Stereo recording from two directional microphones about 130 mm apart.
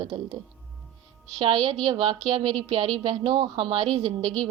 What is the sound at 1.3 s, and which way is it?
A woman's voice, 35° right (ahead or behind).